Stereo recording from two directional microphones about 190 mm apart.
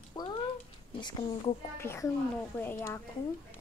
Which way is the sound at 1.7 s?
15° left (ahead or behind).